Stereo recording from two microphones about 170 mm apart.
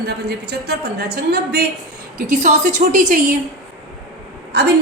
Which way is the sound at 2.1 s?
45° right (ahead or behind).